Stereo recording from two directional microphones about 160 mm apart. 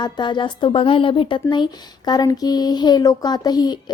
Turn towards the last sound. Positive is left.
turn(degrees=25)  # may be behind; listen again after turning